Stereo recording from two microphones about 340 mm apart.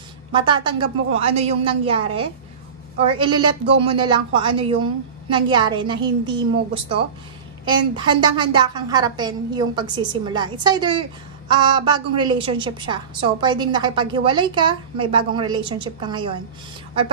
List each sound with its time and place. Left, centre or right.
0.3 s a woman's voice: centre